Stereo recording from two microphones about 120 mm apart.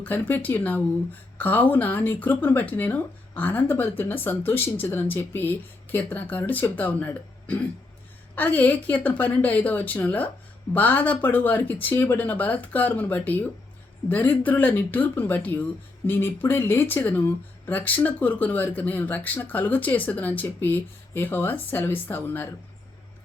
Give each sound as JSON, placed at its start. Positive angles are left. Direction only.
{"t": 0.0, "sound": "speech", "side_deg": 15}